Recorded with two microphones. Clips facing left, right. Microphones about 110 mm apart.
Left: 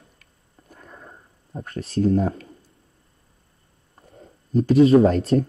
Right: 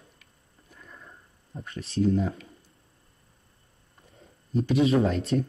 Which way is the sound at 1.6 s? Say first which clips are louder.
Left 6 dB; 35° left (ahead or behind).